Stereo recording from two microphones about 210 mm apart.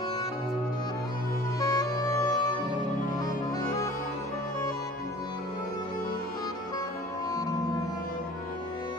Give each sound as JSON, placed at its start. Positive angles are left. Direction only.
{"t": 1.6, "sound": "music", "side_deg": 15}